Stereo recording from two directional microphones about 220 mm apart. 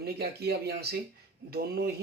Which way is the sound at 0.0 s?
45° right (ahead or behind).